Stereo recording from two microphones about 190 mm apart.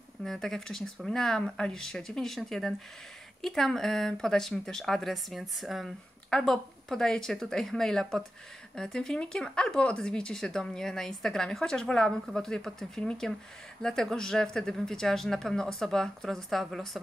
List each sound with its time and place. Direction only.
0.2 s speech: centre (ahead or behind)